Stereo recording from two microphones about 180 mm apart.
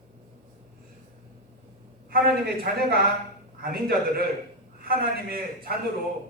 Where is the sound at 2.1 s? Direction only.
60° right (ahead or behind).